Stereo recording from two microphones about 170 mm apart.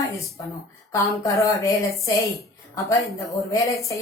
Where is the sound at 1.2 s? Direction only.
20° left (ahead or behind).